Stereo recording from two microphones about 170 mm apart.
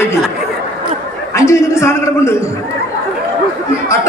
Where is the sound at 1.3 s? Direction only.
15° left (ahead or behind).